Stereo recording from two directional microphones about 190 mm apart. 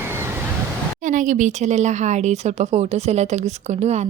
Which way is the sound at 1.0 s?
40° right (ahead or behind).